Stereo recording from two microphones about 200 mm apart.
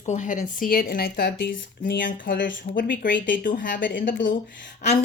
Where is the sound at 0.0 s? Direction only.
40° left (ahead or behind); by 1.5 s 55° left (ahead or behind).